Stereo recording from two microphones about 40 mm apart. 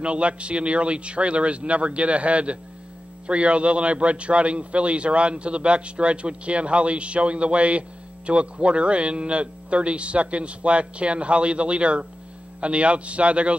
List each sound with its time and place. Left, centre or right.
0.0 s a man's voice: right